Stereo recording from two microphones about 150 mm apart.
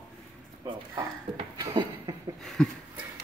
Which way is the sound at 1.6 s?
25° right (ahead or behind).